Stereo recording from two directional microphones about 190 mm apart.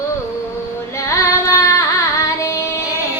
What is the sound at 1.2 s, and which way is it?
Carnatic music, 15° left (ahead or behind).